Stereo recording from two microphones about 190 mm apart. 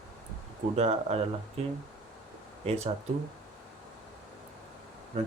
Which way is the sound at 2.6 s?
30° right (ahead or behind).